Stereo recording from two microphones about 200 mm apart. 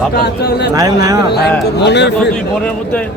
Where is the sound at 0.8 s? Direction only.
20° right (ahead or behind).